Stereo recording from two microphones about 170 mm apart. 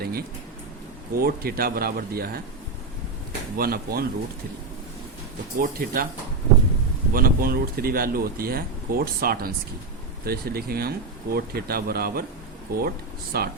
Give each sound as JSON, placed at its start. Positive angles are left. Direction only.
{"t": 0.0, "sound": "speech", "side_deg": -65}
{"t": 3.6, "sound": "speech", "side_deg": -65}
{"t": 5.5, "sound": "speech", "side_deg": -55}
{"t": 7.1, "sound": "speech", "side_deg": -60}